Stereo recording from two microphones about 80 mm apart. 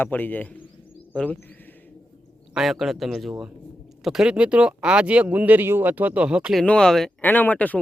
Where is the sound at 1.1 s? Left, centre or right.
Centre.